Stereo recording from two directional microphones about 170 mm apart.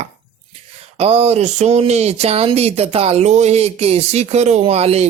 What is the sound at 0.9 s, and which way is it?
Speech, 35° right (ahead or behind).